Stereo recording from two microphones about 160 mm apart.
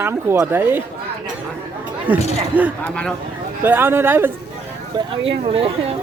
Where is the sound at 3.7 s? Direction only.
15° right (ahead or behind).